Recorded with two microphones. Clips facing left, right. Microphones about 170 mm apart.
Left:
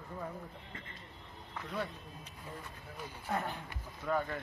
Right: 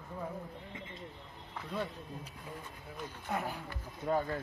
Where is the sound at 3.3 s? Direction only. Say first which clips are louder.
Even; 5° right (ahead or behind).